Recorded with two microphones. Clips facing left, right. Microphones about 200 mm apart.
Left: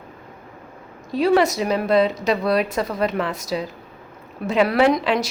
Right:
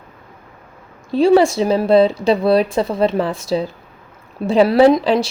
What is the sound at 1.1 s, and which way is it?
Speech, 30° right (ahead or behind).